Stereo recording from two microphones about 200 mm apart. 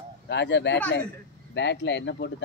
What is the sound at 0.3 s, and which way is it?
Speech, 60° left (ahead or behind).